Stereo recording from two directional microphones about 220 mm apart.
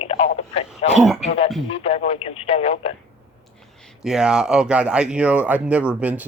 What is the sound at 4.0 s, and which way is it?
Speech, 5° right (ahead or behind).